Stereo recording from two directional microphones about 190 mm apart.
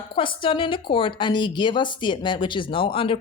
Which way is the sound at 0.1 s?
25° left (ahead or behind).